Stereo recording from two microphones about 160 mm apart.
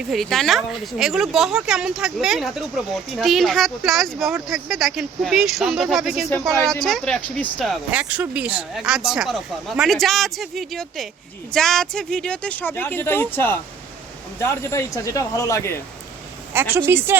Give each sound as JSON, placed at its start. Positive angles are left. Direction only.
{"t": 0.1, "sound": "speech", "side_deg": 0}
{"t": 16.5, "sound": "a woman's voice", "side_deg": -15}